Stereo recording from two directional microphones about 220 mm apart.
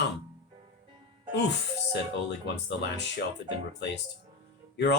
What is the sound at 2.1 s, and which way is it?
Speech, 50° left (ahead or behind).